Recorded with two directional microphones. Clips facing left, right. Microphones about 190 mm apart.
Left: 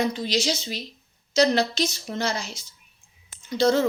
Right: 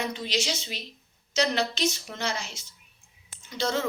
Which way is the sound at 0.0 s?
35° left (ahead or behind).